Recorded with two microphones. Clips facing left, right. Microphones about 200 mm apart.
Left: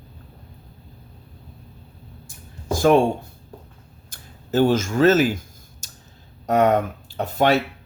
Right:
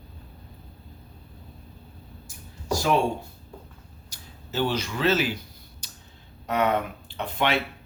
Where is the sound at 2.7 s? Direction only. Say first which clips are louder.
Left 7 dB; 50° left (ahead or behind).